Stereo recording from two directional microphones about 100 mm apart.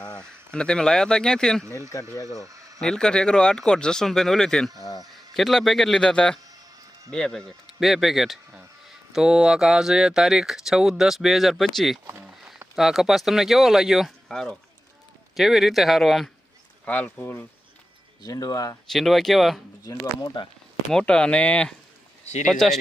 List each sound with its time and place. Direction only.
0.0 s speech: 10° left (ahead or behind)
1.6 s speech: 30° right (ahead or behind)
2.8 s speech: 5° left (ahead or behind)
16.8 s speech: 15° left (ahead or behind)
18.2 s speech: 40° left (ahead or behind)
18.9 s speech: centre (ahead or behind)
20.2 s speech: 50° left (ahead or behind)
20.9 s speech: 10° left (ahead or behind)